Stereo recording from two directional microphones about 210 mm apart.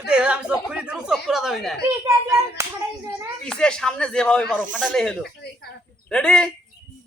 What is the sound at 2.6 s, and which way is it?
Speech, 10° right (ahead or behind).